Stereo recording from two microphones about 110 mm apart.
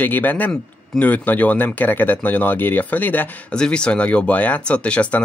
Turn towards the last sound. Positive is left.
turn(degrees=10)  # may be behind; listen again after turning